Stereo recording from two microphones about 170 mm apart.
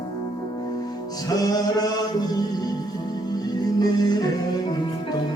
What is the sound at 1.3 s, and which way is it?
Music, 20° left (ahead or behind).